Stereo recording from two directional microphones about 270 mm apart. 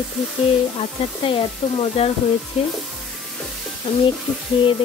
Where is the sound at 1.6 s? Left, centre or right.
Centre.